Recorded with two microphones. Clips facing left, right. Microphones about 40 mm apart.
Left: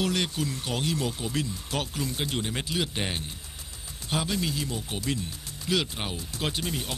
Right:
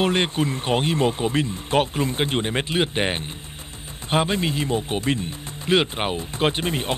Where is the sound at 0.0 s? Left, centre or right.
Right.